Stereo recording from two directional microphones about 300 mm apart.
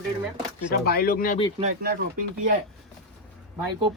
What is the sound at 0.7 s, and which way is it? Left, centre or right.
Speech, left.